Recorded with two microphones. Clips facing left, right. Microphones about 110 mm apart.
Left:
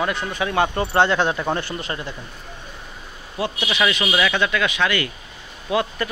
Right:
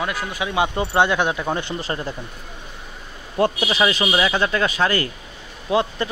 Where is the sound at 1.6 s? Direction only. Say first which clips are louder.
Right 2 dB; 30° right (ahead or behind).